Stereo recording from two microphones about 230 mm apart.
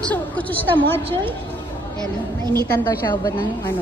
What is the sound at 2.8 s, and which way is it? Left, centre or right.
Speech, centre.